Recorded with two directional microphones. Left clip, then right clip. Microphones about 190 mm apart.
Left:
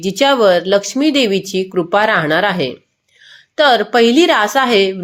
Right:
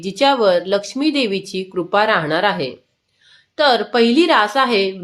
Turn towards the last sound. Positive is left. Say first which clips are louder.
# left 3 dB
turn(degrees=25)  # may be behind; listen again after turning